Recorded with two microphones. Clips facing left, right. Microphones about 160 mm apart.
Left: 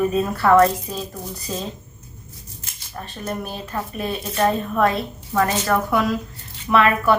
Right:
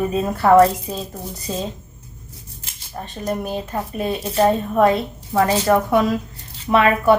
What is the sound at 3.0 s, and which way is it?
Speech, 20° right (ahead or behind).